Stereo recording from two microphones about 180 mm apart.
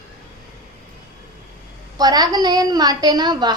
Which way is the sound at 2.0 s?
20° right (ahead or behind).